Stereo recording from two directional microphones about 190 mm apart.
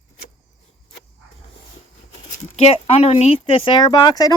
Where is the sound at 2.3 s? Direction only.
35° left (ahead or behind).